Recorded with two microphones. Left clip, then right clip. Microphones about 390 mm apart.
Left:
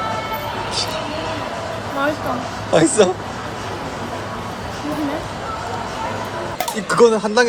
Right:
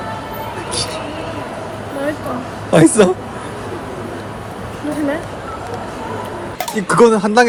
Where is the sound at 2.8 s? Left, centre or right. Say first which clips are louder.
Right 3 dB; centre.